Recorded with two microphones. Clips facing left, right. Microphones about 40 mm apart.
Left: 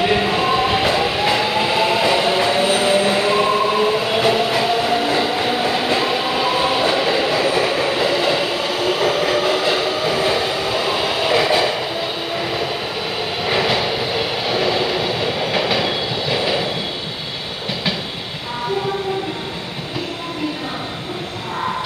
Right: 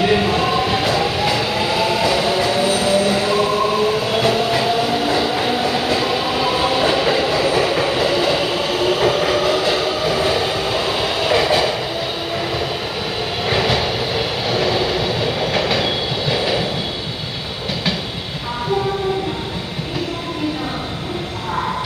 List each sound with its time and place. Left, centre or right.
0.0 s train: centre
13.4 s vehicle: centre